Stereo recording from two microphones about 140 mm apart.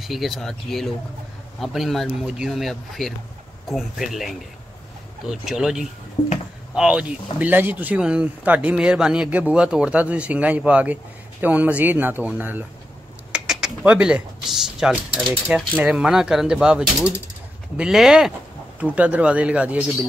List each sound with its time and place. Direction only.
0.0 s speech: centre (ahead or behind)
6.2 s speech: 40° left (ahead or behind)
6.7 s speech: 5° right (ahead or behind)